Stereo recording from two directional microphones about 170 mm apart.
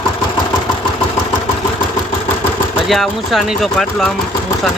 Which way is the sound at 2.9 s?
Centre (ahead or behind).